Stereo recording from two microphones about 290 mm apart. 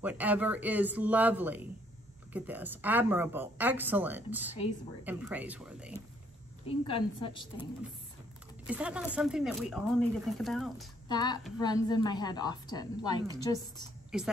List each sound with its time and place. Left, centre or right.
0.0 s speech: centre
6.7 s a woman's voice: centre
8.6 s speech: centre
11.1 s a woman's voice: centre
14.1 s speech: centre